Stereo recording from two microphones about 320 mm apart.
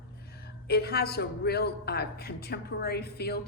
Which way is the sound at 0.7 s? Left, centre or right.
Left.